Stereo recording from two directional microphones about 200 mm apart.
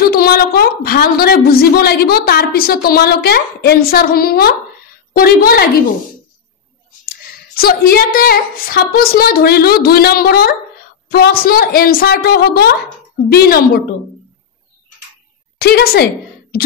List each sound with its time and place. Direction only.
0.0 s a woman's voice: 50° left (ahead or behind)
7.1 s a woman's voice: 50° left (ahead or behind)
15.6 s a woman's voice: 50° left (ahead or behind)